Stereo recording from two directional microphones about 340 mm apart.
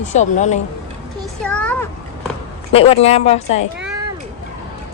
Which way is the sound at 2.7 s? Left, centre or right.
Centre.